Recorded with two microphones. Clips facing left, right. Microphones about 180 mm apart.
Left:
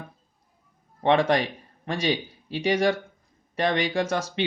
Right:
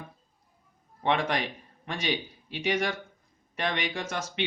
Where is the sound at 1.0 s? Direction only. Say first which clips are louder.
Left 7 dB; 35° left (ahead or behind).